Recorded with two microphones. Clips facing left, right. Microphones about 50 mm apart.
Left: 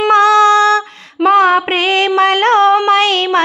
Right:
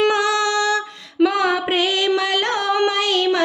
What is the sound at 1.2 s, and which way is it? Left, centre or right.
Female singing, left.